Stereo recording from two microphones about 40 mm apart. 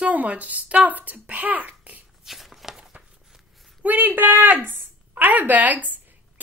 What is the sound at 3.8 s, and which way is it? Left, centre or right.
Speech, right.